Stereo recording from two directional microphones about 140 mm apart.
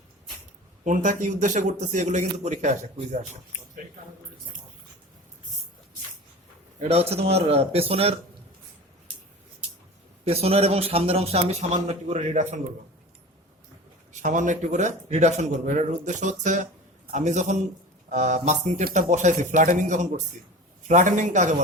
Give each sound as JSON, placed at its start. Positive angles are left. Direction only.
{"t": 0.9, "sound": "speech", "side_deg": -65}
{"t": 6.7, "sound": "a man's voice", "side_deg": -45}
{"t": 10.2, "sound": "a man's voice", "side_deg": -45}
{"t": 14.1, "sound": "speech", "side_deg": -60}